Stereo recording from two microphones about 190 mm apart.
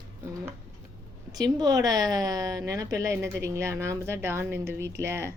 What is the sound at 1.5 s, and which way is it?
A woman's voice, 20° right (ahead or behind).